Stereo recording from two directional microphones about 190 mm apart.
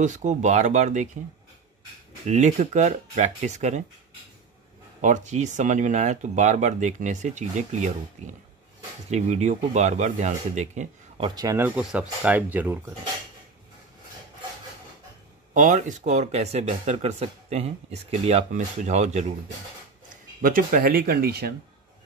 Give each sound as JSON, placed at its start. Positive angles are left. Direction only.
{"t": 0.0, "sound": "speech", "side_deg": -40}
{"t": 2.2, "sound": "speech", "side_deg": -40}
{"t": 5.0, "sound": "speech", "side_deg": -40}
{"t": 11.2, "sound": "speech", "side_deg": -20}
{"t": 15.5, "sound": "speech", "side_deg": -40}
{"t": 20.4, "sound": "speech", "side_deg": -45}